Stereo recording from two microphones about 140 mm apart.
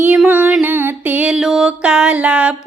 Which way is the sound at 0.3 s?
15° right (ahead or behind).